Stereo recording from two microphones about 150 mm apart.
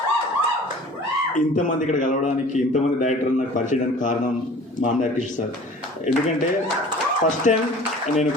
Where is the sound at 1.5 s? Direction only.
60° left (ahead or behind).